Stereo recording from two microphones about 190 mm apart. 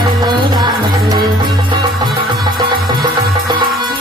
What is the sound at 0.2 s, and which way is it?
Music, 20° right (ahead or behind).